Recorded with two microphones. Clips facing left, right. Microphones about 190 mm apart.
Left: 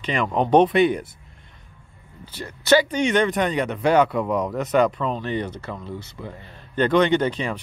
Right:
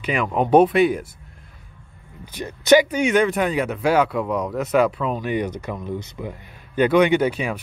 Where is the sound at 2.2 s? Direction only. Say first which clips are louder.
Right 3 dB; 15° right (ahead or behind).